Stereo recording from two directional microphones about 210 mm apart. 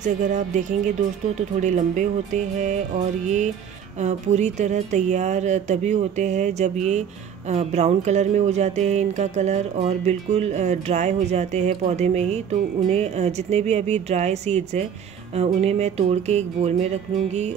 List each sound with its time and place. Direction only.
0.0 s speech: 35° right (ahead or behind)
4.0 s speech: 35° right (ahead or behind)